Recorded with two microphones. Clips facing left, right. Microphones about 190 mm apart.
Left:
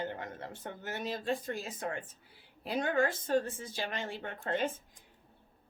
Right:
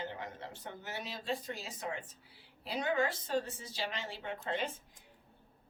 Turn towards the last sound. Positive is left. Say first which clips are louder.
# left 3 dB
turn(degrees=50)  # may be behind; listen again after turning